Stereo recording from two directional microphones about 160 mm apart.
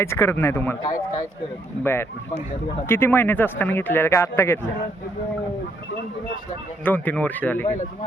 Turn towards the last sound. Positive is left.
turn(degrees=10)  # may be behind; listen again after turning